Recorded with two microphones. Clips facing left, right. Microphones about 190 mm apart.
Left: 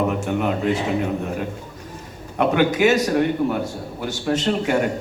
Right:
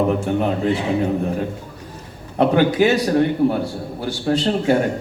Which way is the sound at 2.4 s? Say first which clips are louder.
Right 2 dB; 35° right (ahead or behind).